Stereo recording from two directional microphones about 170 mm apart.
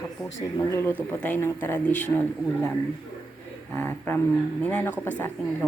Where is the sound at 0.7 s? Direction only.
15° left (ahead or behind).